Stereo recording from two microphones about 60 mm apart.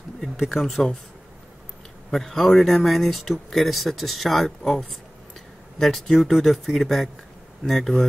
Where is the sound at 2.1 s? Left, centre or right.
Centre.